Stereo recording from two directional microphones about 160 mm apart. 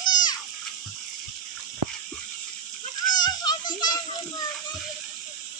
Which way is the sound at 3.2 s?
25° left (ahead or behind).